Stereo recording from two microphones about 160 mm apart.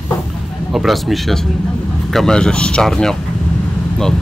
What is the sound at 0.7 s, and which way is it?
Speech, centre (ahead or behind).